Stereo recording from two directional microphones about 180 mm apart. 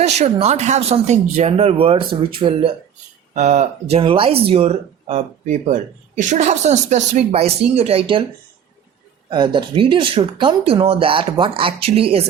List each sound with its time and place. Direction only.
0.0 s speech: 40° right (ahead or behind)
3.3 s speech: 40° right (ahead or behind)
9.3 s speech: 25° right (ahead or behind)